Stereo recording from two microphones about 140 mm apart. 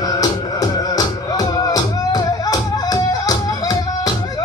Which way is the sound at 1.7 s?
25° left (ahead or behind).